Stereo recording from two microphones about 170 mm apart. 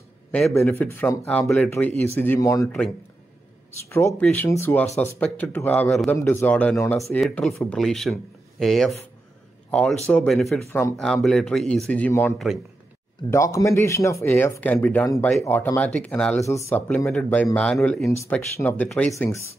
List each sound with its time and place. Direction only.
0.7 s speech: 10° left (ahead or behind)
3.9 s speech: 15° left (ahead or behind)
16.4 s speech: 15° left (ahead or behind)
18.1 s speech: 10° left (ahead or behind)
19.1 s speech: 15° left (ahead or behind)